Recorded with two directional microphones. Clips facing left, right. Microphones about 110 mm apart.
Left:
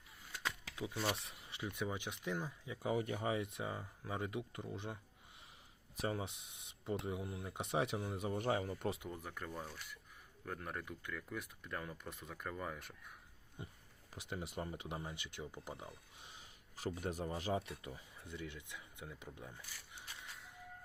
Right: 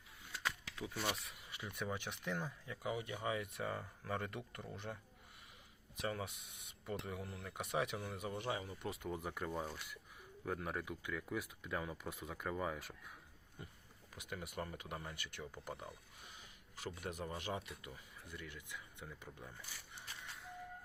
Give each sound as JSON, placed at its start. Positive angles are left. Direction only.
{"t": 0.4, "sound": "a sound", "side_deg": 20}
{"t": 1.0, "sound": "speech", "side_deg": 25}
{"t": 2.8, "sound": "speech", "side_deg": 40}
{"t": 3.2, "sound": "speech", "side_deg": 25}
{"t": 6.0, "sound": "speech", "side_deg": 25}
{"t": 8.4, "sound": "speech", "side_deg": 45}
{"t": 9.0, "sound": "speech", "side_deg": -10}
{"t": 13.6, "sound": "speech", "side_deg": 20}
{"t": 16.3, "sound": "speech", "side_deg": 35}